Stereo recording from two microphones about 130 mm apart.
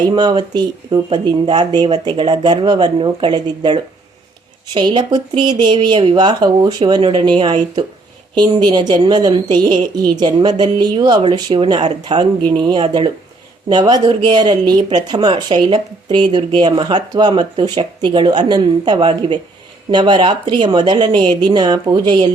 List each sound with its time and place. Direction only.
0.2 s speech: 35° right (ahead or behind)